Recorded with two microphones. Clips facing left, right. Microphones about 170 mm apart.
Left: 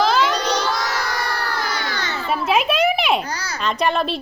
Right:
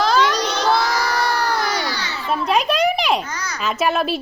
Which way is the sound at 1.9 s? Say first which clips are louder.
Left 1 dB; 50° left (ahead or behind).